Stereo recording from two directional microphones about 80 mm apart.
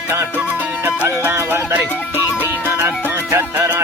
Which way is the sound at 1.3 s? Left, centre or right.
Right.